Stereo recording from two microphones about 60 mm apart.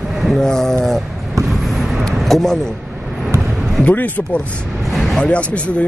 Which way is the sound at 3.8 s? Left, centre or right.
Left.